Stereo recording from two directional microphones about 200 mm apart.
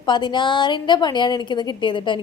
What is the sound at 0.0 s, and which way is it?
A woman's voice, 20° left (ahead or behind).